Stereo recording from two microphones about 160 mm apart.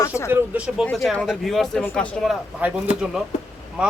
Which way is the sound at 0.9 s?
Centre (ahead or behind).